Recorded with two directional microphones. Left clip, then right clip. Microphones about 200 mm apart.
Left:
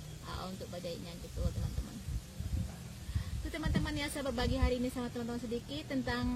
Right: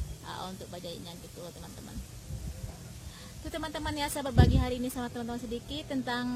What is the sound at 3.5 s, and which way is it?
Speech, 20° right (ahead or behind).